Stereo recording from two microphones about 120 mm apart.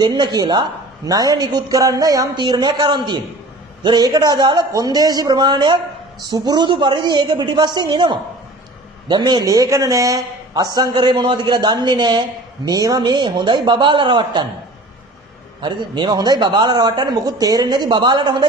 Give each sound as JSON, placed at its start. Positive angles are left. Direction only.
{"t": 0.0, "sound": "a man's voice", "side_deg": -35}
{"t": 15.6, "sound": "a man's voice", "side_deg": -40}